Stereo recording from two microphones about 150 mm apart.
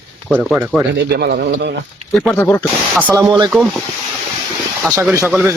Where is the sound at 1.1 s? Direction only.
90° right.